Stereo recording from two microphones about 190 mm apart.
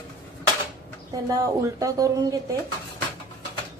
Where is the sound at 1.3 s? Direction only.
15° right (ahead or behind).